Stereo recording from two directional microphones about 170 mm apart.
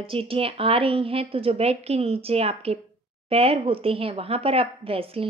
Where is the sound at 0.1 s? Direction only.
35° right (ahead or behind).